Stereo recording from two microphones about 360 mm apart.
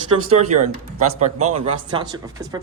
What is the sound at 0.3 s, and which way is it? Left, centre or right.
Speech, centre.